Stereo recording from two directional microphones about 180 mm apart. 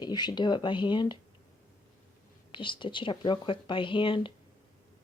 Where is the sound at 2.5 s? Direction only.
25° left (ahead or behind).